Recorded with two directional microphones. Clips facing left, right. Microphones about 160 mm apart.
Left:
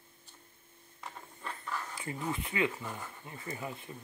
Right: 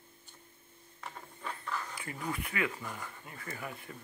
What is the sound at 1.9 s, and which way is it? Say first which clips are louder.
Speech: left 2 dB; 25° left (ahead or behind).